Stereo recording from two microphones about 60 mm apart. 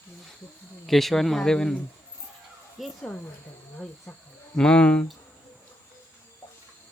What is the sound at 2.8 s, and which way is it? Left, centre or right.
Speech, centre.